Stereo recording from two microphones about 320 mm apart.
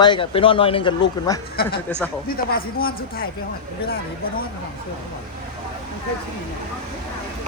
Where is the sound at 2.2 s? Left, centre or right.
Left.